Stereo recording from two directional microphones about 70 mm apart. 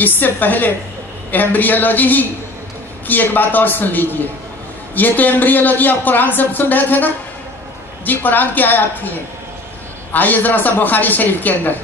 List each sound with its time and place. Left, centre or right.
0.0 s a man's voice: left
10.1 s a man's voice: left